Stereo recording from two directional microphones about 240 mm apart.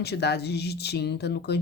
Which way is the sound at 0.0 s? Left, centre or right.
Left.